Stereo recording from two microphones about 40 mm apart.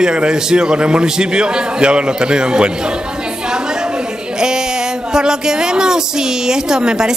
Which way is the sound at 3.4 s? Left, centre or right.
Centre.